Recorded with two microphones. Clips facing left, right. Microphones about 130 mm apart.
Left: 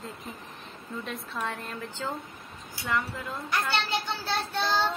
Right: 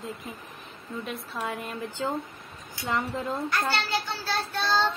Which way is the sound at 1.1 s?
5° right (ahead or behind).